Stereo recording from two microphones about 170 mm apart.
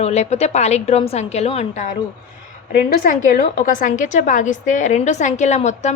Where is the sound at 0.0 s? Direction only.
40° left (ahead or behind).